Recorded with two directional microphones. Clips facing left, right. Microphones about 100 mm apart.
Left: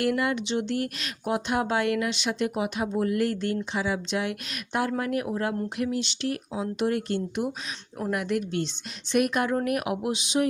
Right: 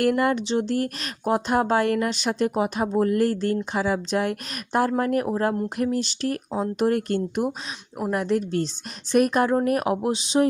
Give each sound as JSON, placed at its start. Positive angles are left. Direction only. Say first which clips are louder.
{"t": 0.0, "sound": "speech", "louder": "right 4 dB", "side_deg": -45}
{"t": 8.1, "sound": "speech", "louder": "right 4 dB", "side_deg": -35}